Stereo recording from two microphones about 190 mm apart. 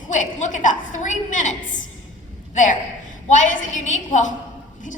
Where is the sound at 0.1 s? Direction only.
40° left (ahead or behind).